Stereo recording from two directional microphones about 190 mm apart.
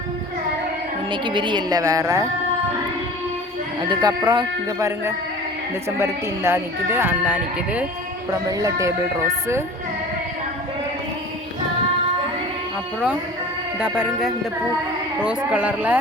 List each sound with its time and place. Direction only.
1.1 s speech: 25° right (ahead or behind)
3.8 s speech: 25° right (ahead or behind); by 7.9 s 5° right (ahead or behind)
8.3 s speech: 20° right (ahead or behind)
13.7 s speech: 5° right (ahead or behind)